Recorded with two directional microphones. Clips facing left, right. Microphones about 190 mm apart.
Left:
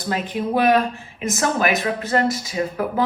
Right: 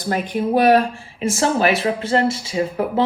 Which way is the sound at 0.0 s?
10° right (ahead or behind).